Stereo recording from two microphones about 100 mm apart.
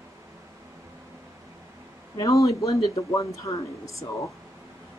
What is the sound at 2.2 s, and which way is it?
Speech, 35° left (ahead or behind).